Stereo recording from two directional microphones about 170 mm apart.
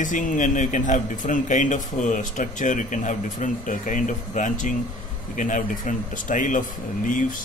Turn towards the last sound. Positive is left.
turn(degrees=50)  # may be behind; listen again after turning